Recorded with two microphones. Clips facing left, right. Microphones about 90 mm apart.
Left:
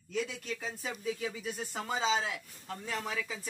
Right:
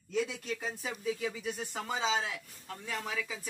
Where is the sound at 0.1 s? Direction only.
20° right (ahead or behind).